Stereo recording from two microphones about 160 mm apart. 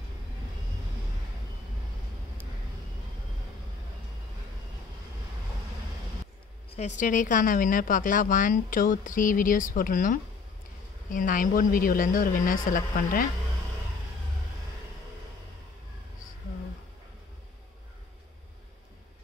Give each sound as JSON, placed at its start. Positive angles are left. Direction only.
{"t": 7.0, "sound": "a woman's voice", "side_deg": 55}